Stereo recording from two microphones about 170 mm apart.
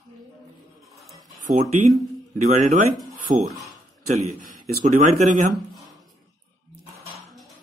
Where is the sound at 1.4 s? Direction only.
50° right (ahead or behind).